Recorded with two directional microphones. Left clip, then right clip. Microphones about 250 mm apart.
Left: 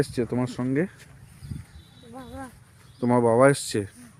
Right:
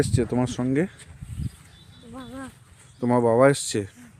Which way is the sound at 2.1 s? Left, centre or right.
Right.